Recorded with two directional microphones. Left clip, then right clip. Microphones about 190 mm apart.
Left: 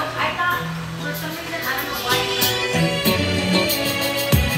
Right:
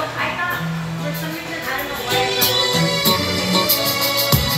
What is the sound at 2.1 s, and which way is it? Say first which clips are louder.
Music: right 3 dB; 20° left (ahead or behind).